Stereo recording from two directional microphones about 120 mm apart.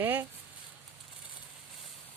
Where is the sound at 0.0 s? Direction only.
15° right (ahead or behind).